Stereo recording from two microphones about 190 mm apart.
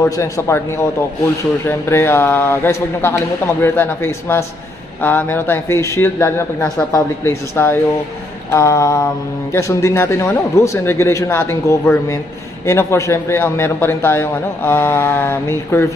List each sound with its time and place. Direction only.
0.0 s a man's voice: 15° left (ahead or behind)